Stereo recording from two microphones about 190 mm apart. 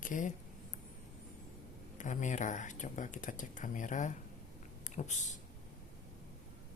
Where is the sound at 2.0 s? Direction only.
40° left (ahead or behind).